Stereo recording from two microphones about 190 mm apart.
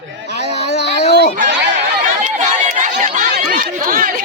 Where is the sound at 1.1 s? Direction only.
60° left (ahead or behind).